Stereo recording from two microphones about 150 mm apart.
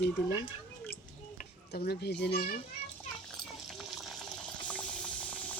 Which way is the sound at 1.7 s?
90° left.